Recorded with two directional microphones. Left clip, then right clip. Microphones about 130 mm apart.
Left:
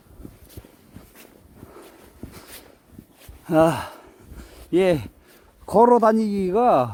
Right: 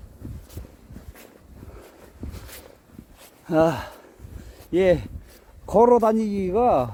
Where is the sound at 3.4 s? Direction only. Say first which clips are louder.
Left 2 dB; 30° left (ahead or behind).